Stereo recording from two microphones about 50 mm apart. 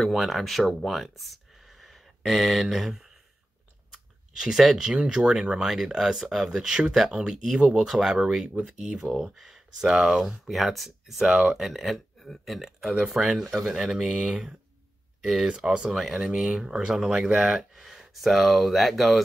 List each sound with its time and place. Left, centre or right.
0.0 s speech: centre
3.9 s a sound: centre
5.0 s speech: centre
11.2 s speech: centre
11.5 s speech: centre